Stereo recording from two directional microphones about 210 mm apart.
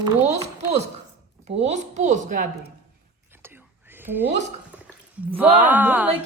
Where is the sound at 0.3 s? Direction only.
30° right (ahead or behind).